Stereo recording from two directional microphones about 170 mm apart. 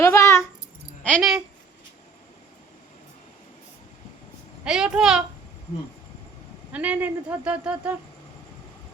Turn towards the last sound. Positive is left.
turn(degrees=-5)  # may be behind; listen again after turning